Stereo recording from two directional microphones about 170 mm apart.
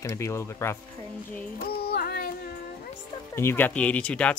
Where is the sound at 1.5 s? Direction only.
65° left (ahead or behind).